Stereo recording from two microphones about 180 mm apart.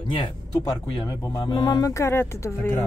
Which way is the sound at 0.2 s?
20° left (ahead or behind).